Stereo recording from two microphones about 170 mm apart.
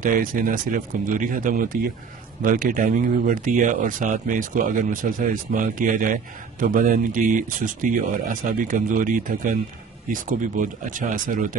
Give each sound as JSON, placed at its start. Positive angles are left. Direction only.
{"t": 0.0, "sound": "speech", "side_deg": -55}